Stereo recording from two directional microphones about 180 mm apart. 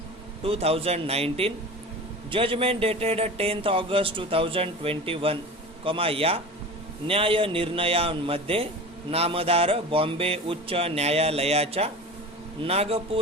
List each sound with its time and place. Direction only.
0.4 s speech: 35° right (ahead or behind)